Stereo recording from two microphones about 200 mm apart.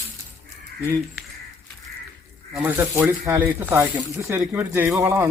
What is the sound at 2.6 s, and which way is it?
Speech, 10° right (ahead or behind).